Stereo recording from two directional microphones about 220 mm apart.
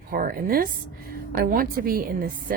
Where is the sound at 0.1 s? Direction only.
40° right (ahead or behind).